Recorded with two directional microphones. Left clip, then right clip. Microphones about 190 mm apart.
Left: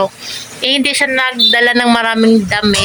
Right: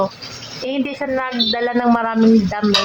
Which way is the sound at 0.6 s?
10° left (ahead or behind).